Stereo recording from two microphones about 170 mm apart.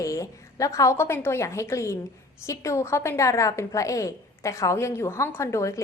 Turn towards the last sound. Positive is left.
turn(degrees=15)  # may be behind; listen again after turning